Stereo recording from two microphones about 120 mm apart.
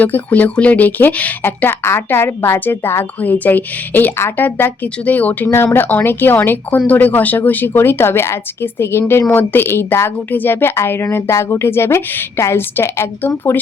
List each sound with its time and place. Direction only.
0.0 s speech: 15° left (ahead or behind)